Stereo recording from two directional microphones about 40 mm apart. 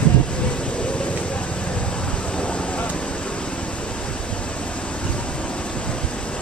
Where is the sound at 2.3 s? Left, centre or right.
Left.